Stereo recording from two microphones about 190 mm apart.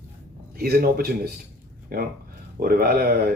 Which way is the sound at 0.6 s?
55° right (ahead or behind).